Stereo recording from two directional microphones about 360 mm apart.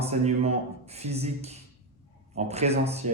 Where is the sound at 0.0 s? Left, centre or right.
Centre.